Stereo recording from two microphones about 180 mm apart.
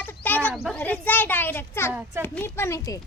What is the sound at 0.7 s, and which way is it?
A child's voice, 10° left (ahead or behind).